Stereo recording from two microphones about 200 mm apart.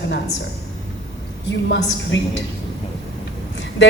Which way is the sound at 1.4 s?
65° left (ahead or behind).